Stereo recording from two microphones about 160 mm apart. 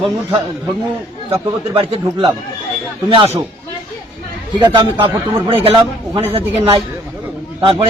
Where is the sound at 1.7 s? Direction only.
35° right (ahead or behind).